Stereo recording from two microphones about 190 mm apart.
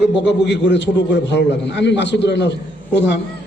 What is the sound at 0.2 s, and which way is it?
A man's voice, 70° left (ahead or behind).